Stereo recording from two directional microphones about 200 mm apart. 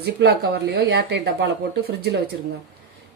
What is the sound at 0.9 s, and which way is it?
Speech, 55° right (ahead or behind).